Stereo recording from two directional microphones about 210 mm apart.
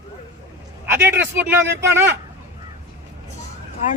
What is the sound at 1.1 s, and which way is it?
Speech, 10° right (ahead or behind).